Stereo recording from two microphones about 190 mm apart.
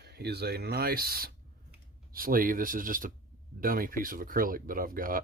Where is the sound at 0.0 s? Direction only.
60° right (ahead or behind).